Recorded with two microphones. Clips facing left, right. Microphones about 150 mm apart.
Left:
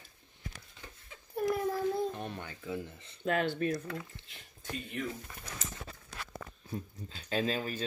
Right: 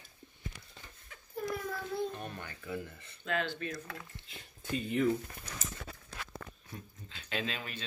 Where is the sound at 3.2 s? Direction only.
50° left (ahead or behind).